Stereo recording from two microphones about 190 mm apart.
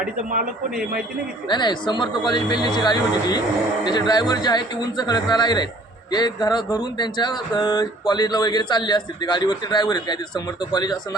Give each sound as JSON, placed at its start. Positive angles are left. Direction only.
{"t": 1.5, "sound": "speech", "side_deg": 25}